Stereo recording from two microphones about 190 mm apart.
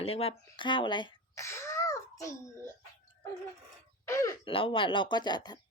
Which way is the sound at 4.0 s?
15° left (ahead or behind).